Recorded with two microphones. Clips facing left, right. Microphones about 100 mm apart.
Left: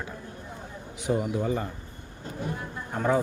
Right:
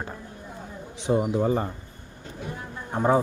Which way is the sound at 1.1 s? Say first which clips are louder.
Right 4 dB; 25° right (ahead or behind).